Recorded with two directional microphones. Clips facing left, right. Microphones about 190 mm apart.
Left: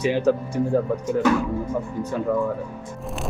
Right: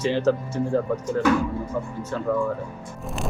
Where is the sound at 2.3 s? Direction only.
15° left (ahead or behind).